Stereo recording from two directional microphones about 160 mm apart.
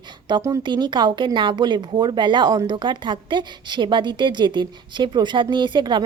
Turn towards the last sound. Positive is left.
turn(degrees=-30)  # may be behind; listen again after turning